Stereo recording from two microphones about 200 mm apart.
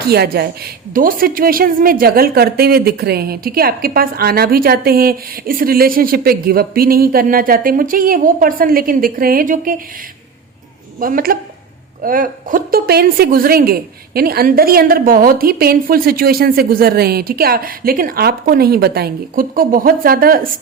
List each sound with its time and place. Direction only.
0.1 s a woman's voice: 50° right (ahead or behind)
11.0 s a woman's voice: 45° right (ahead or behind)